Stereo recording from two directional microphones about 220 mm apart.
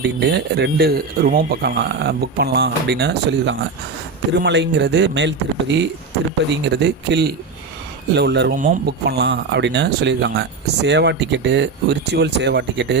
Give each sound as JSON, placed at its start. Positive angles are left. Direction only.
{"t": 0.0, "sound": "speech", "side_deg": -50}